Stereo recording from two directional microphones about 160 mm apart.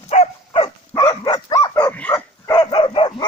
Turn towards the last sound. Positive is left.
turn(degrees=30)  # may be behind; listen again after turning